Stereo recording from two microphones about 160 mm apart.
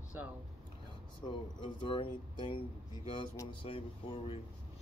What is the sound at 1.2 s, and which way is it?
Speech, 30° left (ahead or behind).